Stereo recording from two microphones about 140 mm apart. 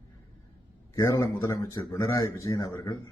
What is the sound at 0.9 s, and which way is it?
Speech, 20° left (ahead or behind).